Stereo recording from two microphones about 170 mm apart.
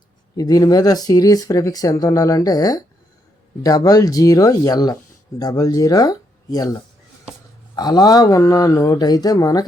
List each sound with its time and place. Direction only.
0.3 s speech: 20° left (ahead or behind)